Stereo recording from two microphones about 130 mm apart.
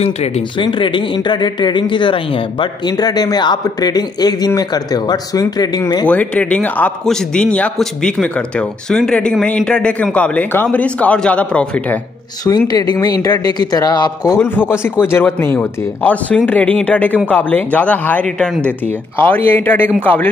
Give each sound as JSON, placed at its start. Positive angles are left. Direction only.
{"t": 0.0, "sound": "speech", "side_deg": 50}
{"t": 0.7, "sound": "speech", "side_deg": 40}
{"t": 6.0, "sound": "a man's voice", "side_deg": 10}
{"t": 12.4, "sound": "speech", "side_deg": 30}
{"t": 14.4, "sound": "a man's voice", "side_deg": 20}